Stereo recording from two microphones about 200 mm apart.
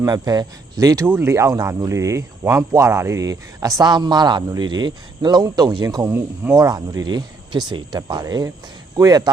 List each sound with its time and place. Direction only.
0.0 s speech: 20° right (ahead or behind)